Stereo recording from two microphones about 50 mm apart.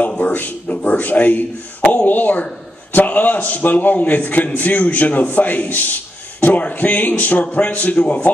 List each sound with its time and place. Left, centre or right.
0.2 s a man's voice: left